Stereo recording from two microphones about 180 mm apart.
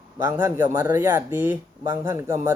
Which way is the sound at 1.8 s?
20° right (ahead or behind).